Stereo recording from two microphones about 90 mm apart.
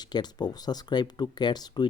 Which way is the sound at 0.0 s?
50° left (ahead or behind).